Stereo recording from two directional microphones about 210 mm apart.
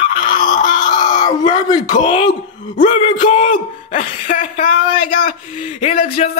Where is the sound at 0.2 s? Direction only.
35° left (ahead or behind).